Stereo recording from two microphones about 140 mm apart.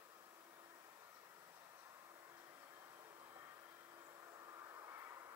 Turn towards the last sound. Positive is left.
turn(degrees=-20)  # may be behind; listen again after turning